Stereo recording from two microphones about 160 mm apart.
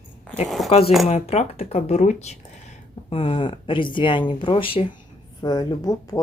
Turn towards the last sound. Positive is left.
turn(degrees=25)  # may be behind; listen again after turning